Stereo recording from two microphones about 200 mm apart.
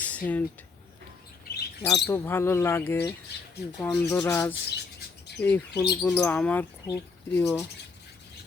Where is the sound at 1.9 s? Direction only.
10° left (ahead or behind).